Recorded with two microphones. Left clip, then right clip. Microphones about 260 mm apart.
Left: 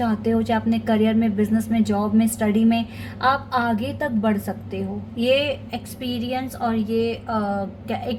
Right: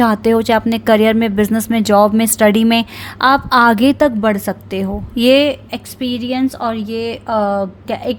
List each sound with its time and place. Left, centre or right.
0.0 s speech: right